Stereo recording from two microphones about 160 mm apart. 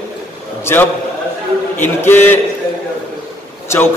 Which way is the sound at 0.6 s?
15° left (ahead or behind).